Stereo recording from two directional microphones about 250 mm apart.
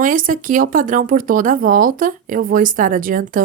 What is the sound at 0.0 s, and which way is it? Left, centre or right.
A woman's voice, right.